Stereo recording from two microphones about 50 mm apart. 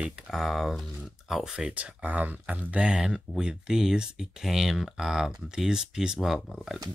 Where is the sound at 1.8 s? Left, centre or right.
Right.